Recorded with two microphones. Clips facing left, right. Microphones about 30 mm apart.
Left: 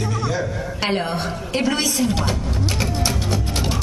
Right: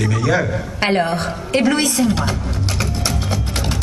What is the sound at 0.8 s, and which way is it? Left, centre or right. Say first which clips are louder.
A woman's voice: right 5 dB; centre.